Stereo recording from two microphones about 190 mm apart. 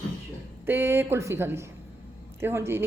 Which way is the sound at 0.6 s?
10° right (ahead or behind).